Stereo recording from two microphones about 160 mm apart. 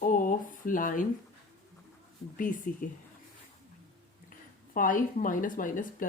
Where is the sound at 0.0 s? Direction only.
55° left (ahead or behind).